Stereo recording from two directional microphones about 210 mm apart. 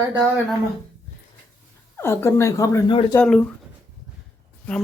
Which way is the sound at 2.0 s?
10° left (ahead or behind).